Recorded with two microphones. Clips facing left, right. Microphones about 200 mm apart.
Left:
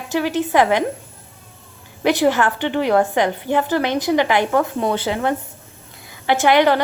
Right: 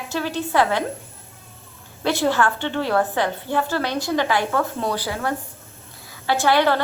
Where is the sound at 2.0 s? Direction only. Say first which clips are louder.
Left 4 dB; 15° left (ahead or behind).